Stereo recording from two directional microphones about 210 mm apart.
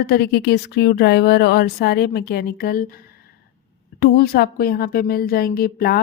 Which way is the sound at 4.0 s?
50° left (ahead or behind).